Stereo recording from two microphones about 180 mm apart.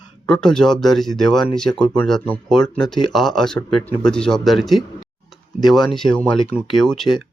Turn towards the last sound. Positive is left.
turn(degrees=0)  # may be behind; listen again after turning